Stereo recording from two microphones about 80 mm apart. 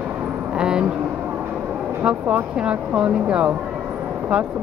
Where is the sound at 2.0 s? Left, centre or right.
Centre.